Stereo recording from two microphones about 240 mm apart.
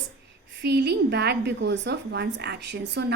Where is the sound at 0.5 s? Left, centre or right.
Right.